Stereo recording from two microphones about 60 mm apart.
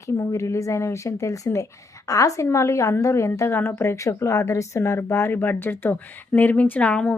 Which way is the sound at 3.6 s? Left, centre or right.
Left.